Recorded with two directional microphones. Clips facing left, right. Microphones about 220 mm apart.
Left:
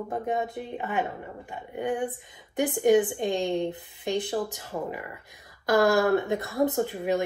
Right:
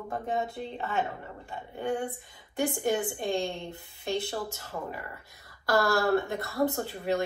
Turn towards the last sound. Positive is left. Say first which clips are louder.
# left 4 dB
turn(degrees=15)  # may be behind; listen again after turning